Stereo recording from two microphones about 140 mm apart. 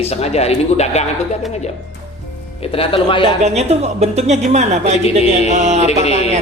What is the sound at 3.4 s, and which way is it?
A woman's voice, 50° right (ahead or behind).